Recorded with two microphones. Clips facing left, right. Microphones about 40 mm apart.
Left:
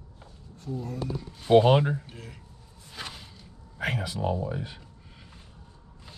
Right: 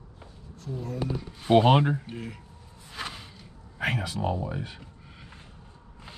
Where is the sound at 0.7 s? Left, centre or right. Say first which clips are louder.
Right 1 dB; centre.